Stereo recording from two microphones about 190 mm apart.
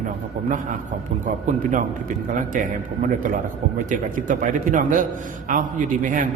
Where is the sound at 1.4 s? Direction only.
45° right (ahead or behind).